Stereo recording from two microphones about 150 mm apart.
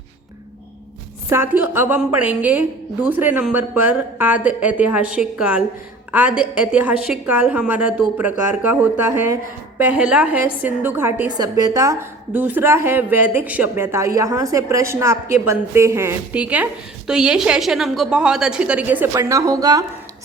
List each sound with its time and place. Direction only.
1.3 s a woman's voice: 15° right (ahead or behind)
11.3 s a woman's voice: 25° right (ahead or behind)